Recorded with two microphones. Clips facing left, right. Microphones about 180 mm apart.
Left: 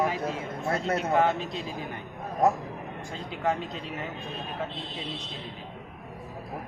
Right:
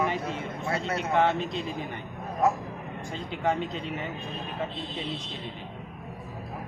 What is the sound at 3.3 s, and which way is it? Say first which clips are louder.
Speech: right 1 dB; centre (ahead or behind).